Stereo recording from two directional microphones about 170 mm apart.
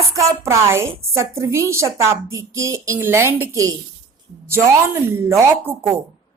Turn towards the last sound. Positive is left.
turn(degrees=-15)  # may be behind; listen again after turning